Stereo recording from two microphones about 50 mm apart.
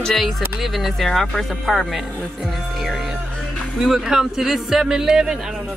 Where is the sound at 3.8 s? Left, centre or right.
Centre.